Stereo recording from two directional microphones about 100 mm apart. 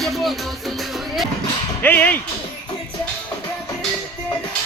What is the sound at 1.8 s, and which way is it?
Speech, 15° left (ahead or behind).